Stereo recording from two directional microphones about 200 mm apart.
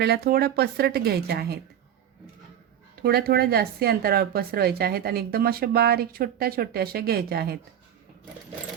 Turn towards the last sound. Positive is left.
turn(degrees=-50)  # may be behind; listen again after turning